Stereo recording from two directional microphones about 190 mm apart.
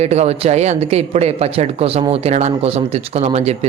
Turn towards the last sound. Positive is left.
turn(degrees=-35)  # may be behind; listen again after turning